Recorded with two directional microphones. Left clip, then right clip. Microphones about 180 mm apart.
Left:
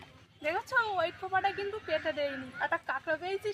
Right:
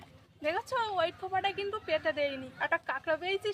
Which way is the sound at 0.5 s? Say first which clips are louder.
Left 3 dB; 30° right (ahead or behind).